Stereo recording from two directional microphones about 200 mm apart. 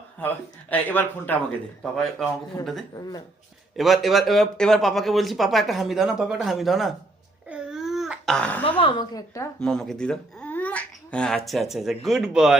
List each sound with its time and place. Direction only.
0.2 s speech: 10° left (ahead or behind)
2.9 s a woman's voice: 20° left (ahead or behind)
3.8 s speech: centre (ahead or behind)
7.5 s baby cry: 5° right (ahead or behind)
8.8 s a woman's voice: 25° left (ahead or behind)
9.6 s speech: 5° left (ahead or behind)